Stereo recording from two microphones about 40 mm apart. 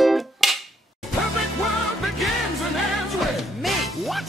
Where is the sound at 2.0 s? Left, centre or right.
Centre.